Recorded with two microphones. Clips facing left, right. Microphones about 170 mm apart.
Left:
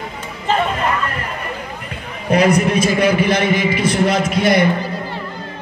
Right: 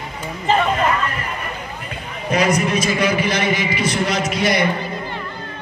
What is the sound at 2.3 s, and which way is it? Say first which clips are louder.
A man's voice: left 4 dB; 55° left (ahead or behind).